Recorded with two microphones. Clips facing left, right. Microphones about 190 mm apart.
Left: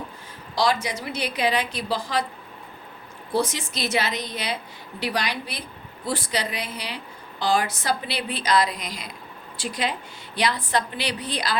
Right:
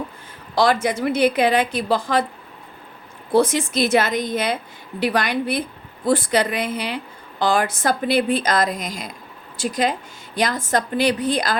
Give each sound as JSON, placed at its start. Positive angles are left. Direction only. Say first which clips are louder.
{"t": 0.5, "sound": "a woman's voice", "louder": "right 5 dB", "side_deg": -55}
{"t": 3.3, "sound": "a woman's voice", "louder": "right 8 dB", "side_deg": -55}